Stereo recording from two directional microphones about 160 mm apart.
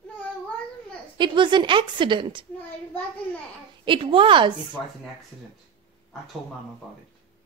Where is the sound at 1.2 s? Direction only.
30° right (ahead or behind).